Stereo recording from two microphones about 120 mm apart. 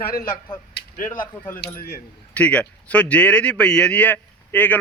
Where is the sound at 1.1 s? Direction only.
15° left (ahead or behind).